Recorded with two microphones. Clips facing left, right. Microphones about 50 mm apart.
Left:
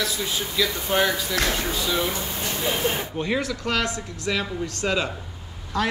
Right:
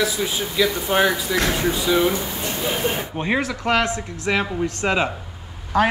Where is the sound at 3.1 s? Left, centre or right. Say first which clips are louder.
Right 3 dB; right.